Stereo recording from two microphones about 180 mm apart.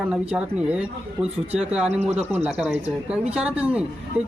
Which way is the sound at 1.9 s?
35° right (ahead or behind).